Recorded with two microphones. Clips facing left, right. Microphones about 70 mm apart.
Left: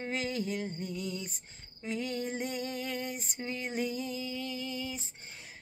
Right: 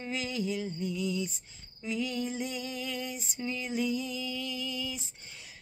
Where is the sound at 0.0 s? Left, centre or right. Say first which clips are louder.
Even; left.